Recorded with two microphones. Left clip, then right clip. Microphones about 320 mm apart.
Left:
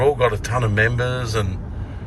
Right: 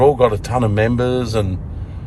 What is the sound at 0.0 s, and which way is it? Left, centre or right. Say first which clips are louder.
A man's voice: right 5 dB; centre.